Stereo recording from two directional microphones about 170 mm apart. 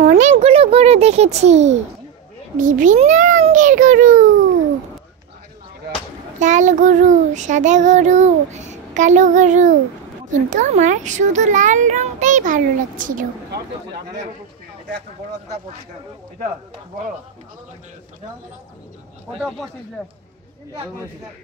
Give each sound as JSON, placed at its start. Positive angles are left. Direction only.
{"t": 0.0, "sound": "a child's voice", "side_deg": -45}
{"t": 2.5, "sound": "child singing", "side_deg": -50}
{"t": 6.4, "sound": "child singing", "side_deg": -45}